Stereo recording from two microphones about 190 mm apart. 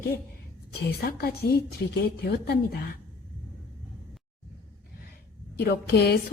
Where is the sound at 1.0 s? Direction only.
55° left (ahead or behind).